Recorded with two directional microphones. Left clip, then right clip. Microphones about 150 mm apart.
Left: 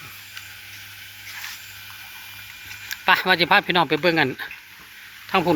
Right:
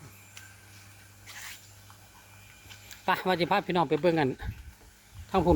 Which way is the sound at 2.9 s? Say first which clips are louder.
Left 10 dB; 15° right (ahead or behind).